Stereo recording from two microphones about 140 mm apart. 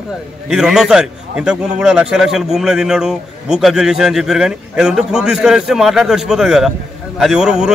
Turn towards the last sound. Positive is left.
turn(degrees=-5)  # may be behind; listen again after turning